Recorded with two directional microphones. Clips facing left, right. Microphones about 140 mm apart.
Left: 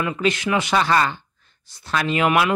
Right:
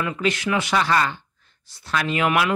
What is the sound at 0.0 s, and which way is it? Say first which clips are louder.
Speech: left 2 dB; 20° left (ahead or behind).